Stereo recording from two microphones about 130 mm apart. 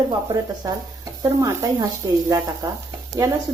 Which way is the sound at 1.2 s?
25° right (ahead or behind).